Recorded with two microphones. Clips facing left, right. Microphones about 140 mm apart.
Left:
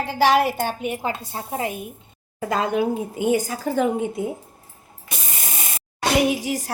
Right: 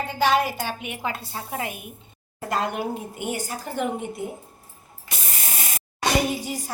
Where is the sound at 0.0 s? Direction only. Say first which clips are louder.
Left 4 dB; 80° left.